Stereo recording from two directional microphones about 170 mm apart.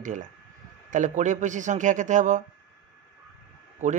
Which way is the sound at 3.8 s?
45° right (ahead or behind).